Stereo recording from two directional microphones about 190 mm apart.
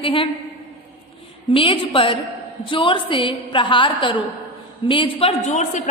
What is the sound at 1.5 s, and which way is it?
A woman's voice, 30° left (ahead or behind).